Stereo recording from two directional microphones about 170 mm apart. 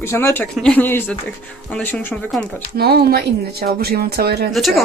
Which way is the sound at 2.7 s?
65° right (ahead or behind).